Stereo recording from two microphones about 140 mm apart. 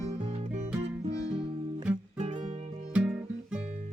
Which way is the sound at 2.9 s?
10° right (ahead or behind).